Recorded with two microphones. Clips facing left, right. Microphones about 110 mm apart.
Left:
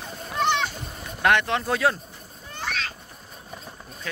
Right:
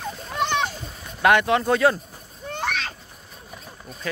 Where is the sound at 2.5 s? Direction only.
60° right (ahead or behind).